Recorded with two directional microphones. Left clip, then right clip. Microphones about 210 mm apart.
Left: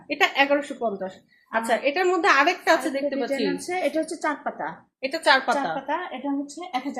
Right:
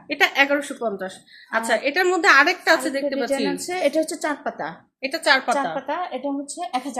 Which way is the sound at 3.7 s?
50° right (ahead or behind).